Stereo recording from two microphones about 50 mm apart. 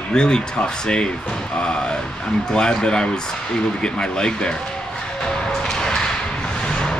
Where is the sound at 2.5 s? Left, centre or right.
Centre.